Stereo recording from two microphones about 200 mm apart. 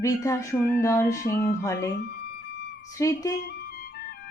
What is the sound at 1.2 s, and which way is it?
Music, 45° left (ahead or behind).